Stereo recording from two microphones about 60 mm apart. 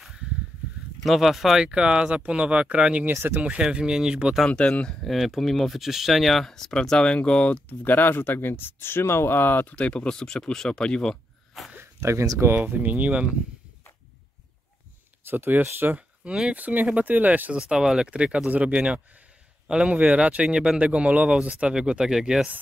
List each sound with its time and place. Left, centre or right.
1.0 s a man's voice: centre
3.1 s speech: right
3.3 s a man's voice: right
4.5 s speech: centre
5.0 s speech: centre; by 9.8 s left
9.8 s speech: centre
11.0 s a sound: centre
11.8 s a sound: right
12.5 s speech: right
15.2 s speech: right
16.3 s a man's voice: centre
16.6 s speech: right
17.6 s a man's voice: centre